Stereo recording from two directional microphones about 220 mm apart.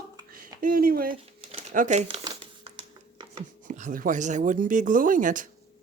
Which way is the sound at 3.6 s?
35° right (ahead or behind).